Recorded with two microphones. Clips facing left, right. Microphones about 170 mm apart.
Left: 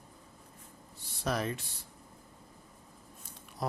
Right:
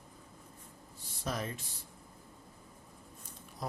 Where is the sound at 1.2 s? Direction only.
75° left (ahead or behind).